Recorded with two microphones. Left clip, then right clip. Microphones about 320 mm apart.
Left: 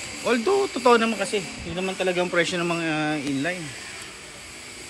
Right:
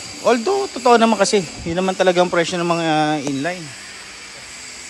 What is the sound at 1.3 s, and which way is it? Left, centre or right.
Speech, right.